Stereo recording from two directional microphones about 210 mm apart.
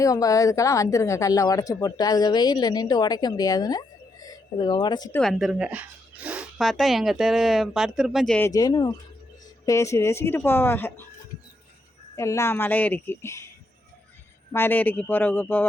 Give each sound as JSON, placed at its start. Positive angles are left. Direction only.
{"t": 0.0, "sound": "speech", "side_deg": 15}
{"t": 5.1, "sound": "speech", "side_deg": 0}
{"t": 12.1, "sound": "speech", "side_deg": 15}
{"t": 14.5, "sound": "speech", "side_deg": 10}